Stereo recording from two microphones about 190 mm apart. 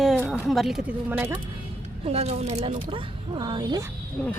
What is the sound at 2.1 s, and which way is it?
Speech, 35° right (ahead or behind).